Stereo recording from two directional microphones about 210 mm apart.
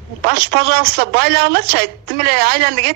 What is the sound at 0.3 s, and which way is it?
Speech, 50° right (ahead or behind).